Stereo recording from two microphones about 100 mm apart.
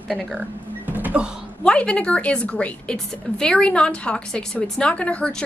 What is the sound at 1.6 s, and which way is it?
A woman's voice, 10° left (ahead or behind).